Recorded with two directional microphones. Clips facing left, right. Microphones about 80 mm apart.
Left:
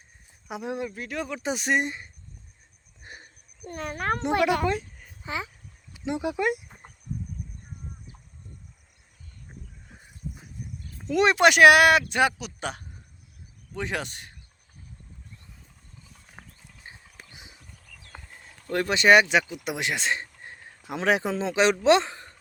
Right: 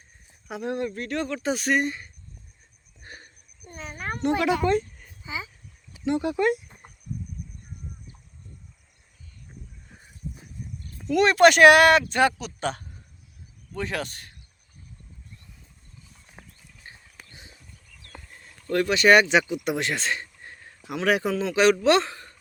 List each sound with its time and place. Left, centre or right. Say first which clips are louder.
0.4 s speech: right 3 dB; centre
1.4 s speech: right 1 dB; centre
3.0 s a sound: right 1 dB; centre
3.7 s speech: left 5 dB; left
4.6 s a sound: right 4 dB; centre
5.2 s speech: left 2 dB; left
6.1 s speech: right 3 dB; centre
11.0 s speech: right 3 dB; left
16.8 s a sound: even; centre
19.3 s speech: right 3 dB; centre
19.7 s speech: left 3 dB; centre